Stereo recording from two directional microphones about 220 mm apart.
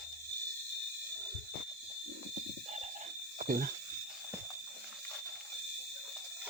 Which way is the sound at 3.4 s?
40° right (ahead or behind).